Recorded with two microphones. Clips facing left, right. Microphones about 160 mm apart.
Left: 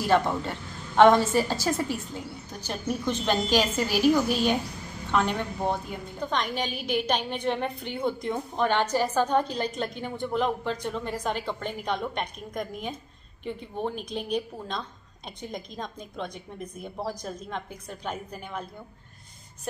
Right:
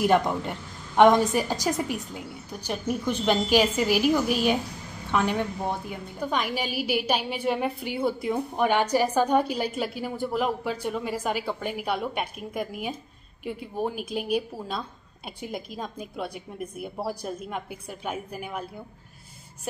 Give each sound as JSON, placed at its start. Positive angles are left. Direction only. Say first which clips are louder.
{"t": 0.0, "sound": "a woman's voice", "louder": "right 1 dB", "side_deg": -15}